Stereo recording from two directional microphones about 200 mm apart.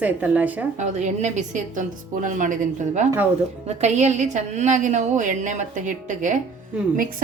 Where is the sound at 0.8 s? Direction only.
35° right (ahead or behind).